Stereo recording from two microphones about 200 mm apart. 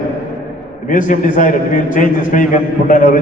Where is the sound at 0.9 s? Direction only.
40° left (ahead or behind).